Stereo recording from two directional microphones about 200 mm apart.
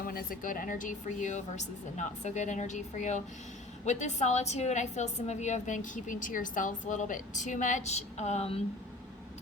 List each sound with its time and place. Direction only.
0.0 s a woman's voice: 45° left (ahead or behind); by 8.6 s 30° left (ahead or behind)